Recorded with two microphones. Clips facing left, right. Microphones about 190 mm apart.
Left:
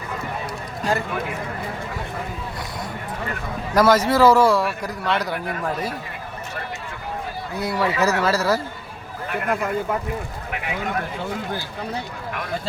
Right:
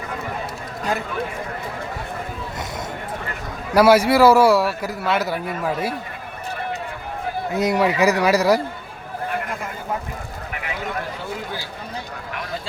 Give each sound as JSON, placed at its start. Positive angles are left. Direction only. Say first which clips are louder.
{"t": 3.8, "sound": "a man's voice", "louder": "right 3 dB", "side_deg": -10}
{"t": 7.5, "sound": "a man's voice", "louder": "right 4 dB", "side_deg": -20}